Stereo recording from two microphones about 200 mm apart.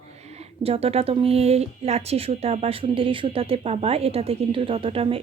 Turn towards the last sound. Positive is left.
turn(degrees=-30)  # may be behind; listen again after turning